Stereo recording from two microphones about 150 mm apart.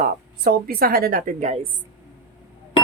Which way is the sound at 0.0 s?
75° right (ahead or behind).